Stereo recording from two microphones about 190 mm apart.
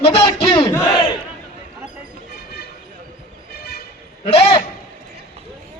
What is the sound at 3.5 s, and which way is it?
Vehicle, 55° left (ahead or behind).